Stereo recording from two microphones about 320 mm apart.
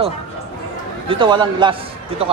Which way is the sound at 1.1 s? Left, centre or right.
Centre.